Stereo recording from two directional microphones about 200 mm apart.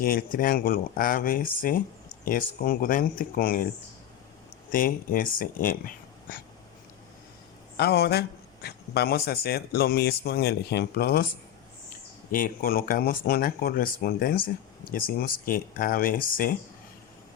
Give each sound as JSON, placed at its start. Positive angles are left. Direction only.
{"t": 0.0, "sound": "speech", "side_deg": 45}
{"t": 4.7, "sound": "speech", "side_deg": 45}
{"t": 7.8, "sound": "speech", "side_deg": 55}